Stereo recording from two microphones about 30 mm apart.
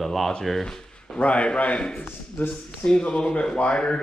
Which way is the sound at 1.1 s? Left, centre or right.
Left.